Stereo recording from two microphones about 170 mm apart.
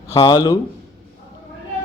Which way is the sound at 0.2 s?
25° left (ahead or behind).